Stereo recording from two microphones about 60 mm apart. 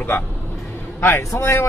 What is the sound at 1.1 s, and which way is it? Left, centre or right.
Speech, left.